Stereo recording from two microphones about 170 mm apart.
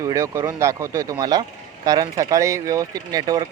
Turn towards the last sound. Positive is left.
turn(degrees=-20)  # may be behind; listen again after turning